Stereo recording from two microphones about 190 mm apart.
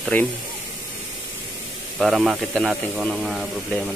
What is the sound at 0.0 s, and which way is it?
Speech, 5° left (ahead or behind).